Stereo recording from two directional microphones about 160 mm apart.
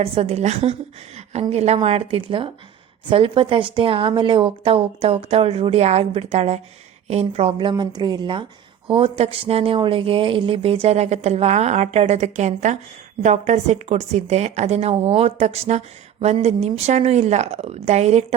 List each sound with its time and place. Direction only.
0.0 s a woman's voice: 40° right (ahead or behind)